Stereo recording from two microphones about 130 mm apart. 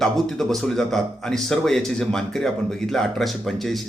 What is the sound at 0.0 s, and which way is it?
Speech, 5° left (ahead or behind).